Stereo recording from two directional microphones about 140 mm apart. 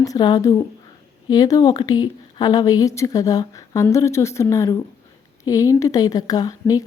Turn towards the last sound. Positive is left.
turn(degrees=25)  # may be behind; listen again after turning